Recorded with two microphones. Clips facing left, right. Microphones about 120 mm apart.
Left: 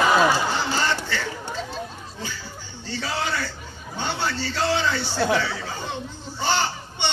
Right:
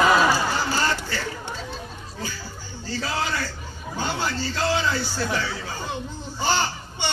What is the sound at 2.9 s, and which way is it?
Speech, 35° right (ahead or behind).